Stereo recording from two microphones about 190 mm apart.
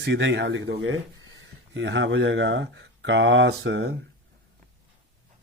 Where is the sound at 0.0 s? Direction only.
70° right (ahead or behind).